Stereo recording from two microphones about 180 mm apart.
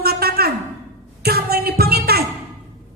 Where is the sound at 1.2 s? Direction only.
60° right (ahead or behind).